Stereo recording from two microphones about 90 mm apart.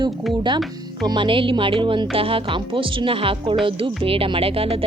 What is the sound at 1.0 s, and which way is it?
A woman's voice, 60° right (ahead or behind).